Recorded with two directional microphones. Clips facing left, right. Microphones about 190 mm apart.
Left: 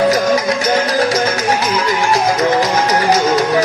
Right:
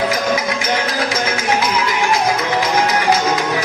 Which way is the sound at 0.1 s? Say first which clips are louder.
Left 5 dB; 40° left (ahead or behind).